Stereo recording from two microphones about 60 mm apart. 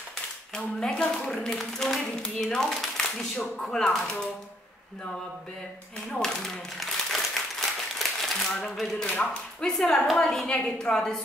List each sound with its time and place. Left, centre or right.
0.6 s speech: centre
6.1 s speech: centre
8.0 s a sound: centre
9.0 s speech: left
9.7 s a woman's voice: centre